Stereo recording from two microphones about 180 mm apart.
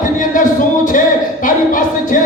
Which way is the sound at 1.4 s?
50° left (ahead or behind).